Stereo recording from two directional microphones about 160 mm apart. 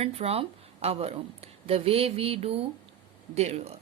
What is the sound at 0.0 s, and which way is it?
Speech, 40° right (ahead or behind).